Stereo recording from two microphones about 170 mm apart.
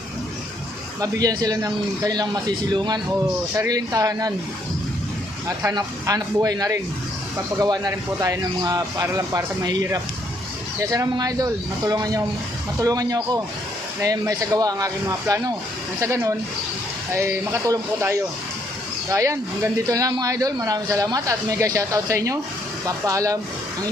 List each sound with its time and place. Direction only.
1.0 s speech: 20° right (ahead or behind)
5.6 s speech: 20° right (ahead or behind)